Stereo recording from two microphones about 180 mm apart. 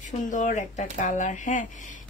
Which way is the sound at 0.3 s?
45° left (ahead or behind).